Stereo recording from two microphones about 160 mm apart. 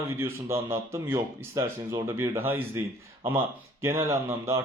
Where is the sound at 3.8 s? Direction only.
15° right (ahead or behind).